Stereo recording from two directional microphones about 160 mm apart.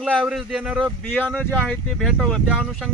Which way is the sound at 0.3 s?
5° right (ahead or behind).